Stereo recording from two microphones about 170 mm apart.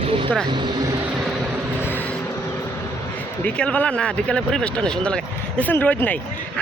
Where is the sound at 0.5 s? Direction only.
25° right (ahead or behind).